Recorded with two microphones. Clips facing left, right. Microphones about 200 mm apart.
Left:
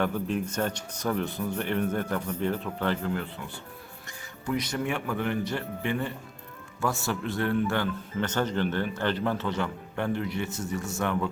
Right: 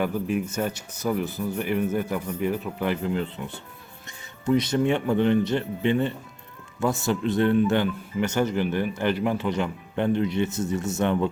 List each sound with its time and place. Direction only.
0.0 s speech: 10° right (ahead or behind)